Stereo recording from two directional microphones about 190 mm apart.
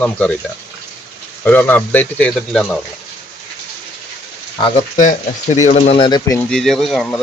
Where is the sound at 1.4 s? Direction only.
10° left (ahead or behind).